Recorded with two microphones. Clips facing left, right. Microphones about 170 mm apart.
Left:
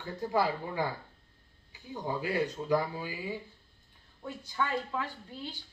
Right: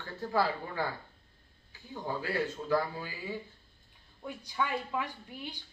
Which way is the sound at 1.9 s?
15° left (ahead or behind).